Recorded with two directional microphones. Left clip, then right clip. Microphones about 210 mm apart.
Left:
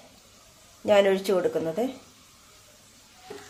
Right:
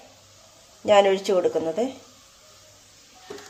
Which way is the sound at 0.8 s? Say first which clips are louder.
Right 3 dB; 5° right (ahead or behind).